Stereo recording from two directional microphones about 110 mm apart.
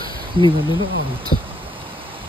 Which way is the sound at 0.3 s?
50° right (ahead or behind).